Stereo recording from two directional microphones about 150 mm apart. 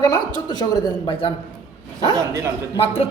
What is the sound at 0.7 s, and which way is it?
Speech, 25° left (ahead or behind).